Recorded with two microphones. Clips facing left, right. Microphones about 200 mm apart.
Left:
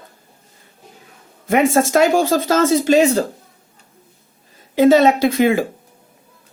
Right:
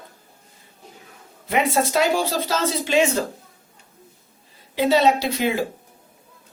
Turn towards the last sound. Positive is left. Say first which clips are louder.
# left 7 dB
turn(degrees=50)  # may be behind; listen again after turning